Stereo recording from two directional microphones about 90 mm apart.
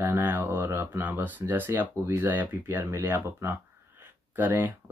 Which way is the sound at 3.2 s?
25° right (ahead or behind).